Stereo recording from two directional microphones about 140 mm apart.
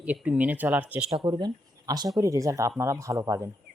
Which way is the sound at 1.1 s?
30° right (ahead or behind).